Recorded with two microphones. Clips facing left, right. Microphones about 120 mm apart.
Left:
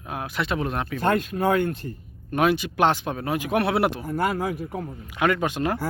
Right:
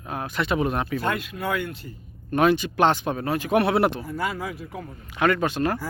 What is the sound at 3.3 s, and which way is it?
Speech, 15° left (ahead or behind).